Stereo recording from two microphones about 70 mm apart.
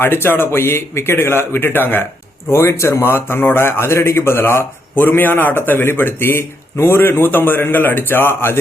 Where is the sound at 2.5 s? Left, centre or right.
Left.